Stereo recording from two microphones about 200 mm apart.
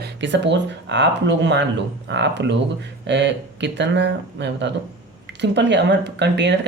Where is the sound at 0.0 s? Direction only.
60° right (ahead or behind).